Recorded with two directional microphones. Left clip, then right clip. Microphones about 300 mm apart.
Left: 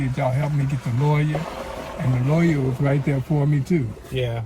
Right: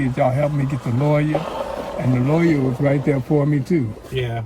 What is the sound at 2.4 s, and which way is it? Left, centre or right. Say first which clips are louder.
Speech: right 4 dB; right.